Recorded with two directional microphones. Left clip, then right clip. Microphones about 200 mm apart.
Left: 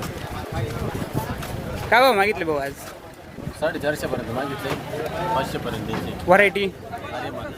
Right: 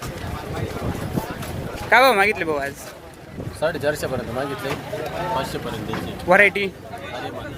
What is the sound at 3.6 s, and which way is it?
Speech, 45° right (ahead or behind).